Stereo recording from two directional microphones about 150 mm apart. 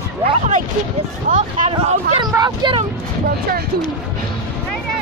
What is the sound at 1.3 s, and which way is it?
Speech, 55° right (ahead or behind).